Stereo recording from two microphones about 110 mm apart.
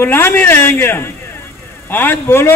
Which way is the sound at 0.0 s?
20° left (ahead or behind).